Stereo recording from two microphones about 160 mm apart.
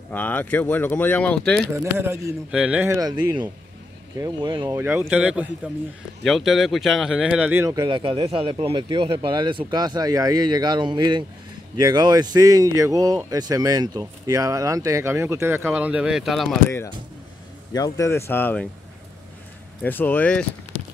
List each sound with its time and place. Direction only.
0.1 s speech: 10° left (ahead or behind)
1.7 s speech: 15° right (ahead or behind)
3.0 s speech: 25° right (ahead or behind)
4.7 s speech: 15° right (ahead or behind)
7.7 s speech: 30° right (ahead or behind); by 16.5 s centre (ahead or behind)
16.6 s speech: 15° left (ahead or behind)
19.8 s speech: 10° left (ahead or behind)